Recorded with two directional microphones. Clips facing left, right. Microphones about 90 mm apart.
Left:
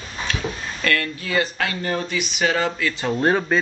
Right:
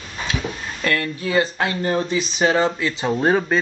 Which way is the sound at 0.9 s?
25° right (ahead or behind).